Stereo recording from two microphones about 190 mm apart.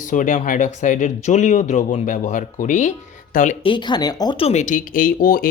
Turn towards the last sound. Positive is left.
turn(degrees=50)  # may be behind; listen again after turning